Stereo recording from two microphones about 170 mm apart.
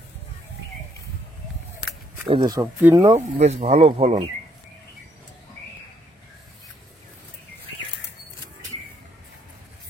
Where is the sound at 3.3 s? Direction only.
40° right (ahead or behind).